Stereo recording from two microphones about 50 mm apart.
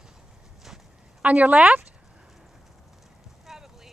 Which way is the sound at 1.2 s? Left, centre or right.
Right.